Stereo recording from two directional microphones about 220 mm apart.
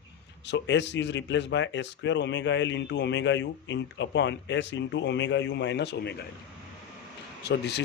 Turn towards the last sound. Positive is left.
turn(degrees=50)  # may be behind; listen again after turning